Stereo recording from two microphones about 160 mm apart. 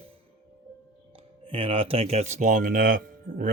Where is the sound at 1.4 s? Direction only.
35° right (ahead or behind).